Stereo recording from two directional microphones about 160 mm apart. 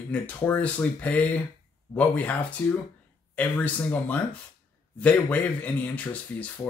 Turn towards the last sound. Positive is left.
turn(degrees=10)  # may be behind; listen again after turning